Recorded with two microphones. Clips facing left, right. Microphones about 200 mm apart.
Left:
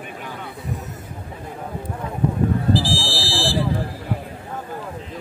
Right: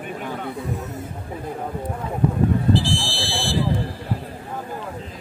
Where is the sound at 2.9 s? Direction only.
Centre (ahead or behind).